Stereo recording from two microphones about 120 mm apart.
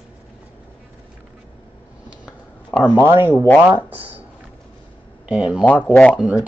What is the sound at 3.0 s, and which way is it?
Speech, 20° right (ahead or behind).